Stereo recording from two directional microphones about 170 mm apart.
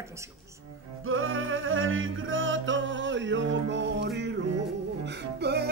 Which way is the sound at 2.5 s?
90° right.